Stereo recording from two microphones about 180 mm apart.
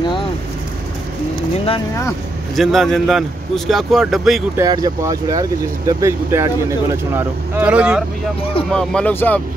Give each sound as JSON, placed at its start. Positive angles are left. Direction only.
{"t": 2.5, "sound": "speech", "side_deg": 0}
{"t": 4.6, "sound": "speech", "side_deg": -20}
{"t": 8.7, "sound": "speech", "side_deg": 5}